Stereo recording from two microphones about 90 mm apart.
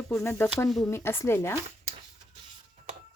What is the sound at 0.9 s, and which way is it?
Speech, 30° left (ahead or behind).